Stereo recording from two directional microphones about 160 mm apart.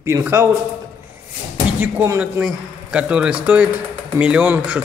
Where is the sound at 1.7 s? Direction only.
10° right (ahead or behind).